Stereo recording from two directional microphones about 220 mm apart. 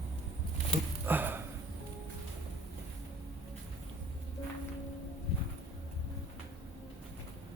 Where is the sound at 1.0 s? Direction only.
10° right (ahead or behind).